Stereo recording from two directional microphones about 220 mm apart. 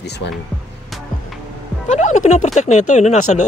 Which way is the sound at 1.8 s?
35° left (ahead or behind).